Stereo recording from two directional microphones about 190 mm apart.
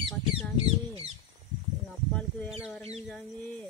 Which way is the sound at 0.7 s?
30° right (ahead or behind).